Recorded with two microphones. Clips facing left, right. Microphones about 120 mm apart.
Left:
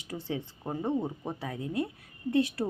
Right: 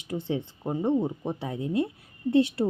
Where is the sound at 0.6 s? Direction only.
10° right (ahead or behind).